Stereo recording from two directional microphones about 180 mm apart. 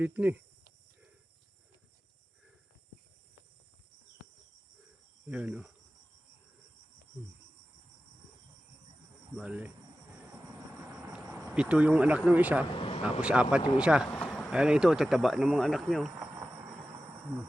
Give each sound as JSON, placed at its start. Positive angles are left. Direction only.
{"t": 0.0, "sound": "speech", "side_deg": -10}
{"t": 5.3, "sound": "speech", "side_deg": -5}
{"t": 9.3, "sound": "speech", "side_deg": -5}
{"t": 11.0, "sound": "a sound", "side_deg": -10}
{"t": 11.6, "sound": "speech", "side_deg": -5}
{"t": 14.1, "sound": "a sound", "side_deg": 5}
{"t": 14.5, "sound": "speech", "side_deg": -5}
{"t": 16.1, "sound": "insect", "side_deg": -15}